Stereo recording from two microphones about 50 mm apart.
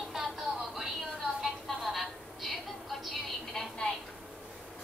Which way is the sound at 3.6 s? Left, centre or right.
Centre.